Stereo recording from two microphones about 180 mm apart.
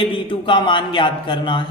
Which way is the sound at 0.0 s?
30° left (ahead or behind).